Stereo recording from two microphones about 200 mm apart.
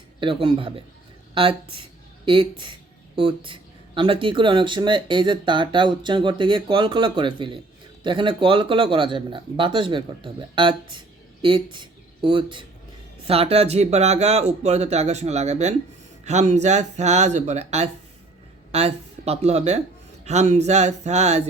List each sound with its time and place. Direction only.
0.2 s speech: 25° right (ahead or behind)